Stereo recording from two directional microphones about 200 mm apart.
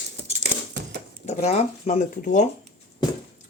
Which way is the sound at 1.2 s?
35° left (ahead or behind).